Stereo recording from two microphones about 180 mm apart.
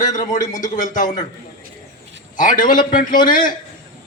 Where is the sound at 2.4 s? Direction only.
50° left (ahead or behind).